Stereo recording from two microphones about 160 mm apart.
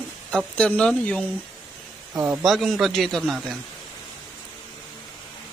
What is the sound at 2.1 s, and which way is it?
Speech, 20° right (ahead or behind).